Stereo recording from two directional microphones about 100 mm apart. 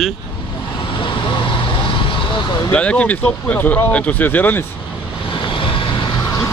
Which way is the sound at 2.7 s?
10° left (ahead or behind).